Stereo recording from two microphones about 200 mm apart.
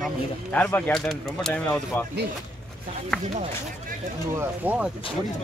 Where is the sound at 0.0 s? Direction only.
5° left (ahead or behind).